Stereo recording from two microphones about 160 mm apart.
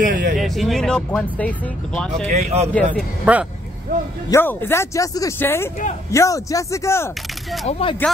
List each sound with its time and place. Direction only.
0.0 s a sound: 55° right (ahead or behind)
0.4 s speech: centre (ahead or behind)
2.2 s speech: 45° right (ahead or behind)
3.3 s speech: 10° right (ahead or behind)
4.3 s speech: 15° left (ahead or behind)
7.6 s speech: 35° left (ahead or behind)